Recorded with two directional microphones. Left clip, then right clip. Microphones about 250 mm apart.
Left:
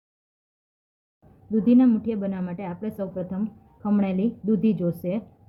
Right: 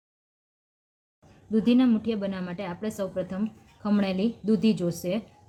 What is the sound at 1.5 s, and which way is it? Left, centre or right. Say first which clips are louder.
Speech: left 3 dB; centre.